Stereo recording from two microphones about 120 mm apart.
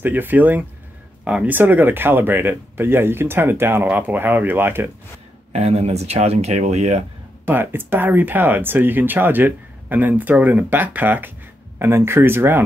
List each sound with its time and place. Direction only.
0.0 s speech: 15° right (ahead or behind)
5.5 s speech: 60° right (ahead or behind)
7.4 s speech: 15° right (ahead or behind)